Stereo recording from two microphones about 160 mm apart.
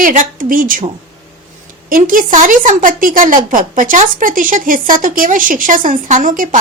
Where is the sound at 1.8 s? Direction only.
60° right (ahead or behind).